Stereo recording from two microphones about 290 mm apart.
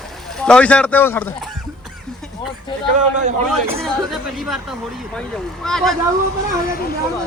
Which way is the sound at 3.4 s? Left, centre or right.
Centre.